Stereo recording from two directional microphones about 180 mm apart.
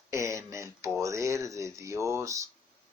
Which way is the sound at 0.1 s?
15° right (ahead or behind).